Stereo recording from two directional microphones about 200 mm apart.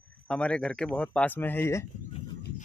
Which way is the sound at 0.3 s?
5° left (ahead or behind).